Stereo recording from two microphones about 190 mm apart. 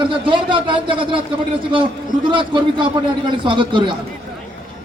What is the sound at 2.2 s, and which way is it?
A man's voice, 25° right (ahead or behind).